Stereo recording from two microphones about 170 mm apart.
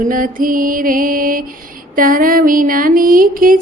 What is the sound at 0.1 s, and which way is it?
Music, 55° right (ahead or behind).